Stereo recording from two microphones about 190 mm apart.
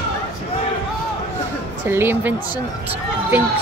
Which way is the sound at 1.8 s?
10° right (ahead or behind).